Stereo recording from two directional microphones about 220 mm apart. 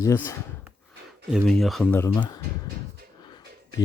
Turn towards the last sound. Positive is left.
turn(degrees=15)  # may be behind; listen again after turning